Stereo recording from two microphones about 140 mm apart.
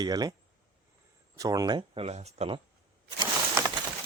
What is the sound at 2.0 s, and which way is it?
Speech, 50° right (ahead or behind).